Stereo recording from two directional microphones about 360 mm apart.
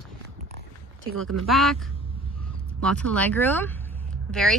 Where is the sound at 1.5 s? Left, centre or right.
Centre.